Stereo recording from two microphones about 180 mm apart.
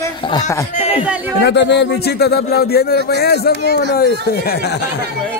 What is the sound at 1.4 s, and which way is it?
A man's voice, 75° left (ahead or behind).